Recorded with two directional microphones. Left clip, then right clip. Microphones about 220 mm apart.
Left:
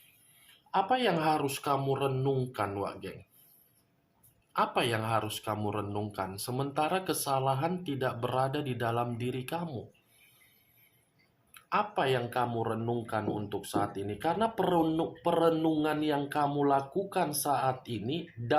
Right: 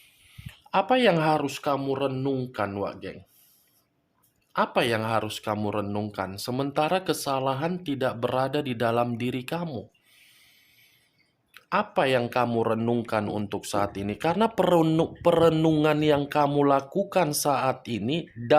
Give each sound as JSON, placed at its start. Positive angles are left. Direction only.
{"t": 0.7, "sound": "speech", "side_deg": -45}
{"t": 4.5, "sound": "speech", "side_deg": -40}
{"t": 11.5, "sound": "speech", "side_deg": -40}